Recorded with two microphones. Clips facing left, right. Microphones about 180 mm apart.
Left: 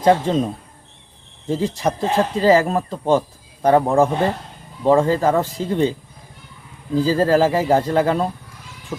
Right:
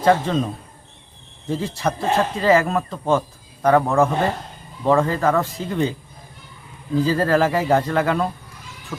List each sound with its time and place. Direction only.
0.0 s speech: 20° left (ahead or behind)
2.4 s speech: 30° left (ahead or behind)
6.9 s speech: 30° left (ahead or behind)